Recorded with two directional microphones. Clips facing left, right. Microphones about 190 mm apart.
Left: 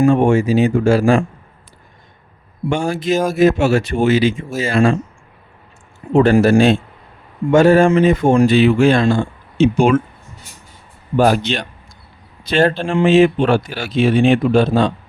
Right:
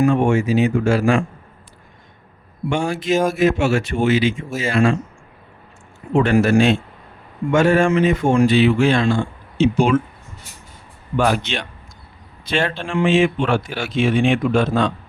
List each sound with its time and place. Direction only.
0.0 s speech: 30° left (ahead or behind)
2.8 s speech: 35° left (ahead or behind)
6.1 s speech: 35° left (ahead or behind); by 10.0 s 50° left (ahead or behind)
11.2 s speech: 40° left (ahead or behind)